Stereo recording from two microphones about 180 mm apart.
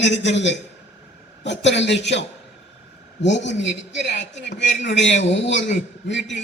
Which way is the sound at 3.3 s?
80° left.